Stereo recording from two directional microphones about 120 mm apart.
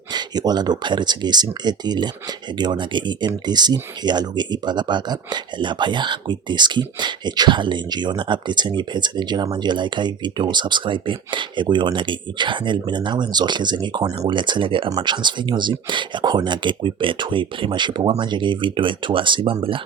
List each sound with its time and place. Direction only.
0.1 s speech: 35° right (ahead or behind)